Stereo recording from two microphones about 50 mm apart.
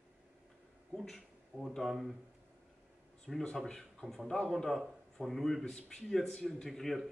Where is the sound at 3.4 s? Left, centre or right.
Centre.